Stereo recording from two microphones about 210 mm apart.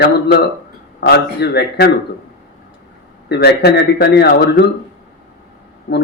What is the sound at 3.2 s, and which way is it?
Speech, 50° left (ahead or behind).